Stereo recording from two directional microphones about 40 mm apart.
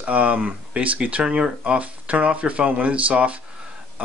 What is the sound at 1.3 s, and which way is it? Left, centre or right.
Speech, right.